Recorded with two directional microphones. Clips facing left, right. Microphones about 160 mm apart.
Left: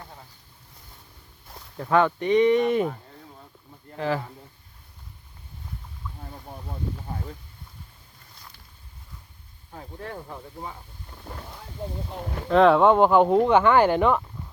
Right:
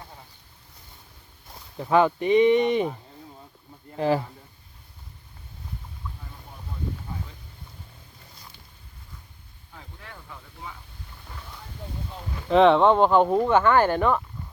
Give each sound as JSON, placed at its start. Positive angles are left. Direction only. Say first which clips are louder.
{"t": 1.8, "sound": "speech", "louder": "right 1 dB", "side_deg": -5}
{"t": 3.9, "sound": "speech", "louder": "right 4 dB", "side_deg": -20}
{"t": 9.7, "sound": "speech", "louder": "left 9 dB", "side_deg": 40}
{"t": 12.5, "sound": "speech", "louder": "even", "side_deg": 0}